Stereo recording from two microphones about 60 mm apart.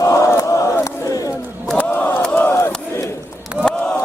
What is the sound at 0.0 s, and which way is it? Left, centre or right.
Battle cry, left.